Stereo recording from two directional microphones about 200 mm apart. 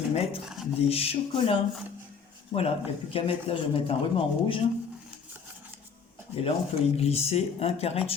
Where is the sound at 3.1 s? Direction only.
30° left (ahead or behind).